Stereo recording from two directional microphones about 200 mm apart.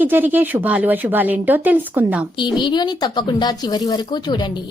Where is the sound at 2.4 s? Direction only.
20° left (ahead or behind).